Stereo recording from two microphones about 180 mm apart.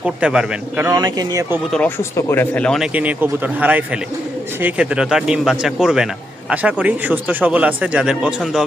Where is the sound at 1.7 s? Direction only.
10° left (ahead or behind).